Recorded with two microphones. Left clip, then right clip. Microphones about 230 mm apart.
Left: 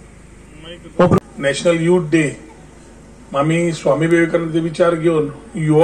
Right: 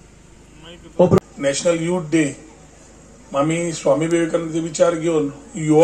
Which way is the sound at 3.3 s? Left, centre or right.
Right.